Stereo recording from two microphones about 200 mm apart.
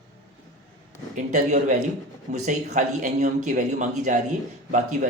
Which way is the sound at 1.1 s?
35° right (ahead or behind).